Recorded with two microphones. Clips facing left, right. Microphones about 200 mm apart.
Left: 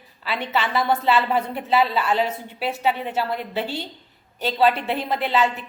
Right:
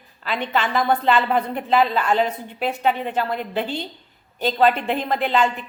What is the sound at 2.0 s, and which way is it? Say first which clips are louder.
Speech: right 2 dB; 45° right (ahead or behind).